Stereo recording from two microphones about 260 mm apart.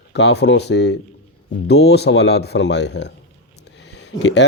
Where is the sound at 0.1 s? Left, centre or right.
Left.